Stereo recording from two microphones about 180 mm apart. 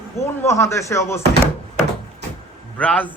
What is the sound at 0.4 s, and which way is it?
Speech, 15° left (ahead or behind).